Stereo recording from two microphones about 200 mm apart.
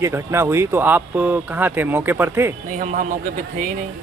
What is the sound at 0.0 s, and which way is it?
Speech, 15° right (ahead or behind).